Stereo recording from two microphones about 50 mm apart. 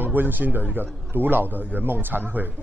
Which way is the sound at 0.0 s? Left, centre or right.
Right.